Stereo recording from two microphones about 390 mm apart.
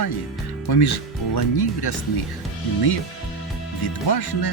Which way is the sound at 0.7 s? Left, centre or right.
Left.